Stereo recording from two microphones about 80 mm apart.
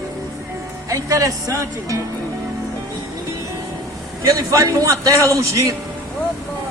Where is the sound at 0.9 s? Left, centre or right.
Right.